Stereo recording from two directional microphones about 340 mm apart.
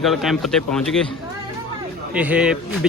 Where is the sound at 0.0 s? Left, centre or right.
Centre.